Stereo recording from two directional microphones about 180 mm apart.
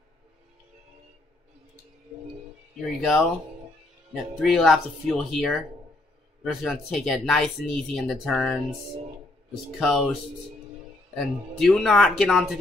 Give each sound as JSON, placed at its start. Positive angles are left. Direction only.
{"t": 3.0, "sound": "speech", "side_deg": 0}
{"t": 9.8, "sound": "speech", "side_deg": 0}
{"t": 11.1, "sound": "speech", "side_deg": 0}